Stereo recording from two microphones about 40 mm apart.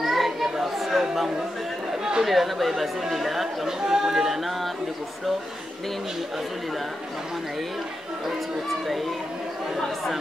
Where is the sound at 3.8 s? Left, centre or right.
Centre.